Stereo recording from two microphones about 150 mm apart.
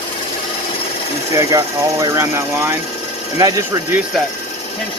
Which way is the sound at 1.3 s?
20° right (ahead or behind).